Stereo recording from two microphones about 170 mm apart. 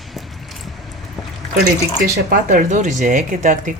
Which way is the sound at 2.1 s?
55° right (ahead or behind).